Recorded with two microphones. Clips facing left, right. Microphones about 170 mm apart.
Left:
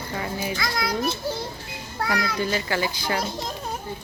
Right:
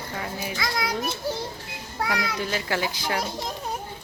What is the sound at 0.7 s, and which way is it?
Speech, 15° right (ahead or behind).